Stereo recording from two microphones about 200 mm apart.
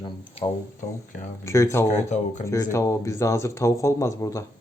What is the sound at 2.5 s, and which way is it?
Speech, 15° left (ahead or behind).